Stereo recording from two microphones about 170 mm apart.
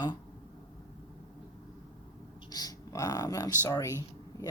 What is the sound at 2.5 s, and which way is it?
Speech, 20° left (ahead or behind).